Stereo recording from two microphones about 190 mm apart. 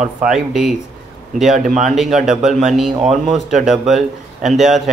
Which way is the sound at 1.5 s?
40° right (ahead or behind).